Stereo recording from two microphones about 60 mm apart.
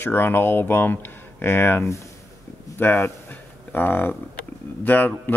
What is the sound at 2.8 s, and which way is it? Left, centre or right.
Speech, left.